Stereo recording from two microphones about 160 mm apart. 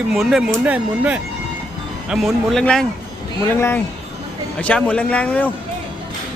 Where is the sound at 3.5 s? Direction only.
15° left (ahead or behind).